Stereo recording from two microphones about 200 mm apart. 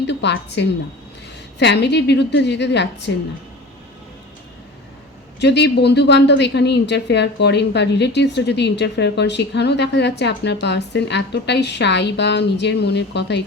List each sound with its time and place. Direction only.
0.0 s a woman's voice: 60° left (ahead or behind)
5.4 s a woman's voice: 60° left (ahead or behind)